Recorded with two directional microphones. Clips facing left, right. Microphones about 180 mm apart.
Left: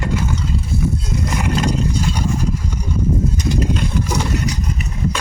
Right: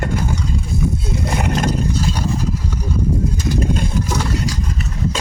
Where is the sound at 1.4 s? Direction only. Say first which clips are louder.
Left 1 dB; 55° right (ahead or behind).